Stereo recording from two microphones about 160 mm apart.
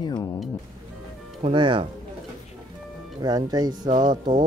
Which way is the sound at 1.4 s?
30° right (ahead or behind).